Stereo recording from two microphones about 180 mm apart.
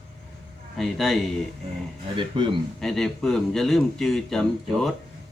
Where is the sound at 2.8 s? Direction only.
Centre (ahead or behind).